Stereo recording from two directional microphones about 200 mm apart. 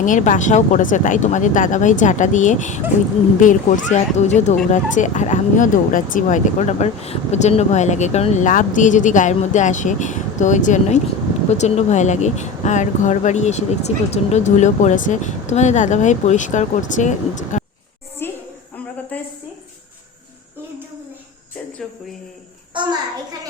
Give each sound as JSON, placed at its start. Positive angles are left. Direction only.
{"t": 0.0, "sound": "speech", "side_deg": 40}
{"t": 18.2, "sound": "a sound", "side_deg": 10}
{"t": 22.7, "sound": "a child's voice", "side_deg": -20}